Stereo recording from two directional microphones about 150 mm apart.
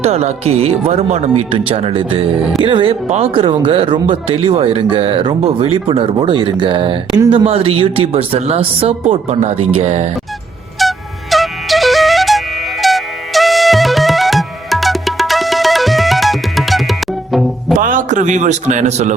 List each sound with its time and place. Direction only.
0.0 s speech: 45° right (ahead or behind)
10.8 s music: centre (ahead or behind)
17.7 s a man's voice: 60° right (ahead or behind)